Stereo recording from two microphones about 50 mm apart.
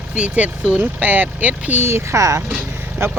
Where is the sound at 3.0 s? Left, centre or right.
Right.